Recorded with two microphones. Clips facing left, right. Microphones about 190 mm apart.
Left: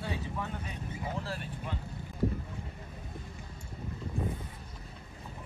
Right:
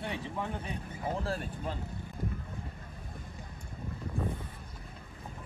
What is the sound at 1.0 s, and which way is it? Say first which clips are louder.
Speech: right 5 dB; 40° right (ahead or behind).